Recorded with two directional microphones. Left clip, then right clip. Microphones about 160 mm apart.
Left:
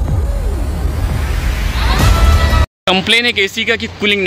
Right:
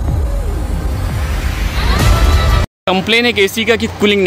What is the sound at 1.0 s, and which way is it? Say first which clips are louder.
Music: left 1 dB; centre (ahead or behind).